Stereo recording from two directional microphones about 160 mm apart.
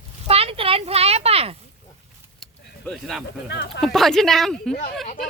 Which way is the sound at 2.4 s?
Centre (ahead or behind).